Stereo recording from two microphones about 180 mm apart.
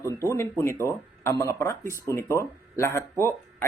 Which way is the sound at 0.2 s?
15° left (ahead or behind).